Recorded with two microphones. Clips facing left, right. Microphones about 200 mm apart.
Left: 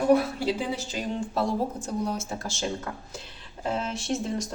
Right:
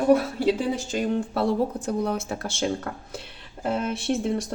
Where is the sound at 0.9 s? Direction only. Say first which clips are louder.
Right 6 dB; 60° right (ahead or behind).